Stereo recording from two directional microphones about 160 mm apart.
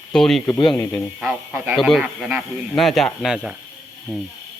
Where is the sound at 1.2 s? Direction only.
5° right (ahead or behind).